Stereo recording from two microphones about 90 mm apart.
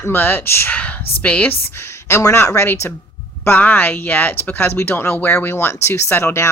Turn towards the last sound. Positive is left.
turn(degrees=30)  # may be behind; listen again after turning